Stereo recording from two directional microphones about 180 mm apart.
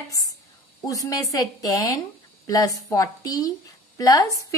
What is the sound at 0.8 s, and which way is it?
A woman's voice, 20° left (ahead or behind).